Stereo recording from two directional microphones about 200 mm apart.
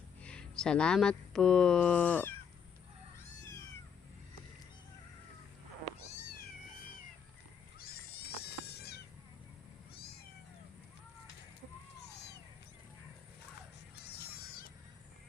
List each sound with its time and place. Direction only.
0.2 s speech: 5° left (ahead or behind)
7.8 s a sound: 50° left (ahead or behind)
13.9 s music: 50° left (ahead or behind)